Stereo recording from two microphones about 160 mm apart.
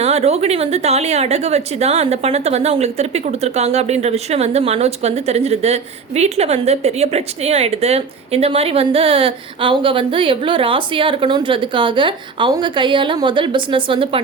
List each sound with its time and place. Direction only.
0.0 s a woman's voice: 40° right (ahead or behind)